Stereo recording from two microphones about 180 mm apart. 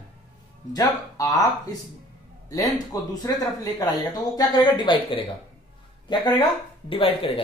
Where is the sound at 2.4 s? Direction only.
20° left (ahead or behind).